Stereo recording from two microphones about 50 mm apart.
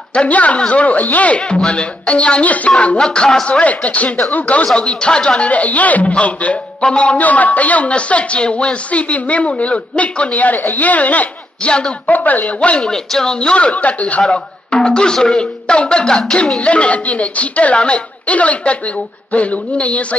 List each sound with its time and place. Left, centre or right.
0.1 s speech: left
3.0 s speech: centre
3.4 s speech: left
4.7 s speech: centre
5.5 s speech: left
12.1 s speech: left
12.5 s speech: left
12.9 s speech: centre; by 14.2 s left
14.3 s speech: centre